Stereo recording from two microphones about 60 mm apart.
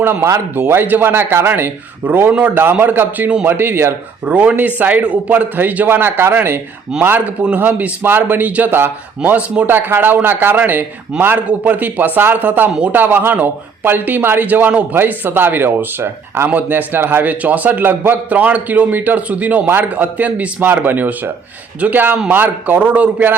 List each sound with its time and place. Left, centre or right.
0.0 s a man's voice: right
4.3 s a man's voice: right
6.9 s speech: centre
7.4 s a man's voice: right
17.4 s a man's voice: right